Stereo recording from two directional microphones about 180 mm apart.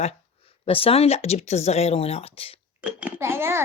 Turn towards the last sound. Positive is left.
turn(degrees=-15)  # may be behind; listen again after turning